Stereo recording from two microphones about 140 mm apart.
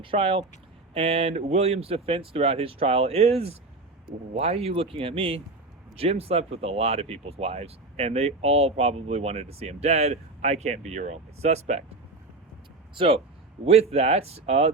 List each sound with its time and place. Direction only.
0.0 s speech: 40° right (ahead or behind)
12.9 s speech: 40° right (ahead or behind)
13.7 s speech: 50° right (ahead or behind)